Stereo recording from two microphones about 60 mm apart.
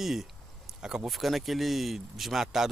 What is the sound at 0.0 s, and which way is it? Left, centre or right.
Speech, centre.